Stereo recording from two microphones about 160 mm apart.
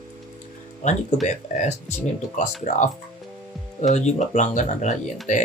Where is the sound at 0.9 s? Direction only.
50° left (ahead or behind).